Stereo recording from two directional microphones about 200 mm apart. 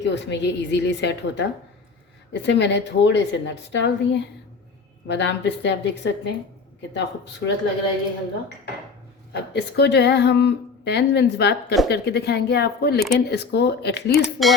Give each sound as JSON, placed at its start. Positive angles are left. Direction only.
{"t": 0.0, "sound": "speech", "side_deg": 60}
{"t": 9.3, "sound": "speech", "side_deg": 60}